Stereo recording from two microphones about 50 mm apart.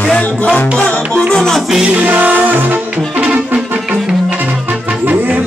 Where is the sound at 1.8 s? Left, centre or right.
Right.